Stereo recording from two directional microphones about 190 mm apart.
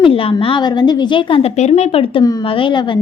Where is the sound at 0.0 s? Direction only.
30° left (ahead or behind).